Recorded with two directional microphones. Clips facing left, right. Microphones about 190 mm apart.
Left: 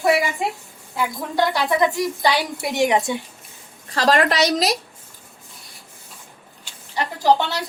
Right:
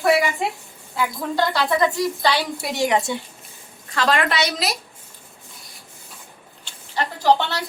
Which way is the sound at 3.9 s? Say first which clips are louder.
Left 3 dB; 35° left (ahead or behind).